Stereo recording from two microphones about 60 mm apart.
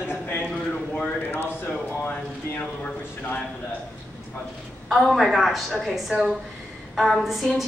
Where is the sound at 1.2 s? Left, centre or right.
Left.